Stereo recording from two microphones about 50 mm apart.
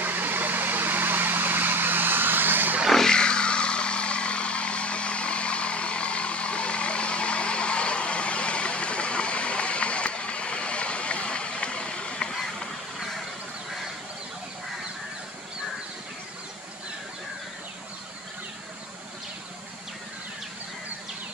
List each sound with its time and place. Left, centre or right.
0.0 s vehicle: right
2.9 s vehicle: centre